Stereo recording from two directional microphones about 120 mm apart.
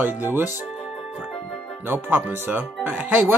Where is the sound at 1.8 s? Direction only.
15° right (ahead or behind).